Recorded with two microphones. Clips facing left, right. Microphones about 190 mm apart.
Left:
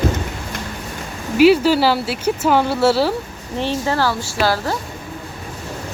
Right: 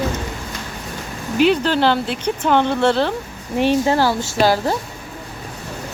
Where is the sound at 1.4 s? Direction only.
5° left (ahead or behind).